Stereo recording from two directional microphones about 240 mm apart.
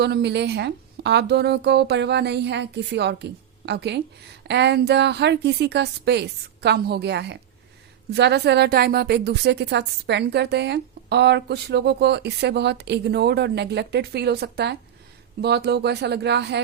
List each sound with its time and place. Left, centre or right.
0.0 s a woman's voice: right